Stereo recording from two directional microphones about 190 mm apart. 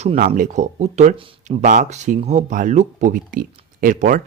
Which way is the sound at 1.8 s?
40° right (ahead or behind).